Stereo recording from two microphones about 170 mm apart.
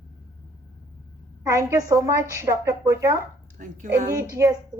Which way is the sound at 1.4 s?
20° right (ahead or behind).